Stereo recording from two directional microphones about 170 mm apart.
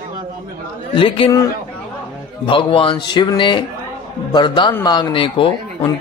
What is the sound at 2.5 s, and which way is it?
A man's voice, 30° left (ahead or behind).